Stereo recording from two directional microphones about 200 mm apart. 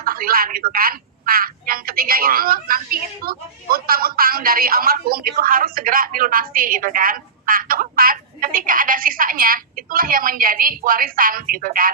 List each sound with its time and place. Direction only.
0.0 s speech: 45° right (ahead or behind)